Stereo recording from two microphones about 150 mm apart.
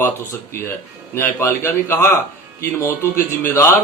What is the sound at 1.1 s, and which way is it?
A man's voice, 15° left (ahead or behind).